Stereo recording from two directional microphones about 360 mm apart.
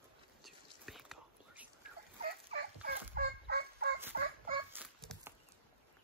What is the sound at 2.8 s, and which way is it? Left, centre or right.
Fowl, right.